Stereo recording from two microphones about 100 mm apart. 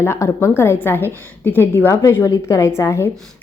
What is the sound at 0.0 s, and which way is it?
Speech, 25° left (ahead or behind).